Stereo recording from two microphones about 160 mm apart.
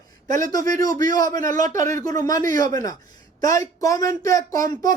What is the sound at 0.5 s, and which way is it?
Speech, 25° left (ahead or behind).